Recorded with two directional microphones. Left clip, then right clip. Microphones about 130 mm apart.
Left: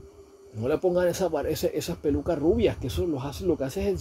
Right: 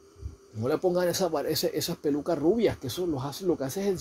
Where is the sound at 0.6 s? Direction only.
15° right (ahead or behind).